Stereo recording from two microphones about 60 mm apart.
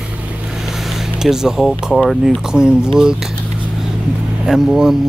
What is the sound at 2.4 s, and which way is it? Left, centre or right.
Speech, centre.